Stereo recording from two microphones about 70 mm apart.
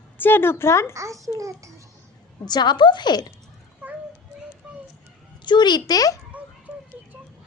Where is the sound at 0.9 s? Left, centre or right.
Right.